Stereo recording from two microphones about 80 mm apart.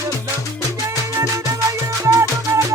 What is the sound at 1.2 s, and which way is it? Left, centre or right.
Music, right.